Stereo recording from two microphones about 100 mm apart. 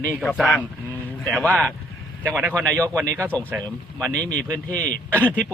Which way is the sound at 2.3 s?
20° right (ahead or behind).